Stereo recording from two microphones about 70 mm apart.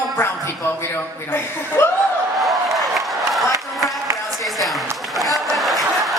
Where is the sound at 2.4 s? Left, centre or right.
Centre.